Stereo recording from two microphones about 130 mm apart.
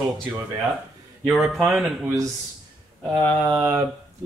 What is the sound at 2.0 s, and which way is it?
Mantra, 25° right (ahead or behind).